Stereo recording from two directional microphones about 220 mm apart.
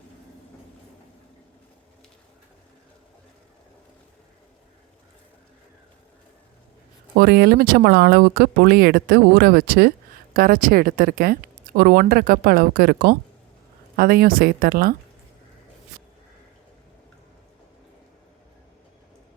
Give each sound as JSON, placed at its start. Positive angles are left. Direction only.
{"t": 7.2, "sound": "a woman's voice", "side_deg": -45}